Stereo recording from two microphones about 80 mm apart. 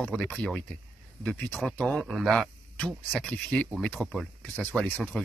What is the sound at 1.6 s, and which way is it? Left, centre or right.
Speech, centre.